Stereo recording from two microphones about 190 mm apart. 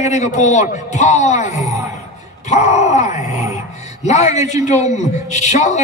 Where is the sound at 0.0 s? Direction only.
35° left (ahead or behind).